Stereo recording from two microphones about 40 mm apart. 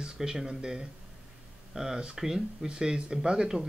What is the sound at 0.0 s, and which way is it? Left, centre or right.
Speech, centre.